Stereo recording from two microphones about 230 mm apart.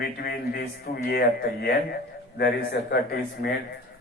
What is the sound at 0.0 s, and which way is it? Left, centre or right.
A man's voice, left.